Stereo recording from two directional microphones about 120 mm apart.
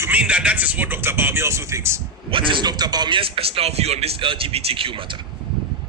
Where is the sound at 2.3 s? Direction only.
40° right (ahead or behind).